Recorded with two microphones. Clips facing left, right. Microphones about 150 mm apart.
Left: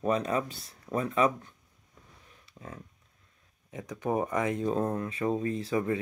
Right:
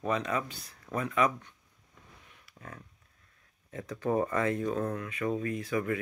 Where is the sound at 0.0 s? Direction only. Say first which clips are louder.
Left 3 dB; 40° left (ahead or behind).